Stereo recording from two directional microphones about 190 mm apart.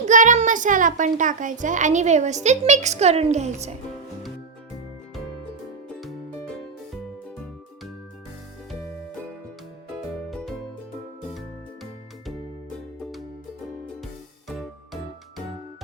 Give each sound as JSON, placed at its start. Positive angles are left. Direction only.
{"t": 0.0, "sound": "a child's voice", "side_deg": -40}
{"t": 5.9, "sound": "music", "side_deg": 0}
{"t": 10.2, "sound": "music", "side_deg": 0}
{"t": 14.4, "sound": "music", "side_deg": 0}